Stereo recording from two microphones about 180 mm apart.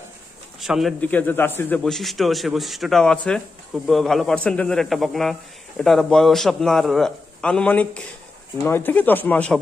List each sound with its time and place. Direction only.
0.6 s speech: centre (ahead or behind)
1.0 s a man's voice: 10° left (ahead or behind)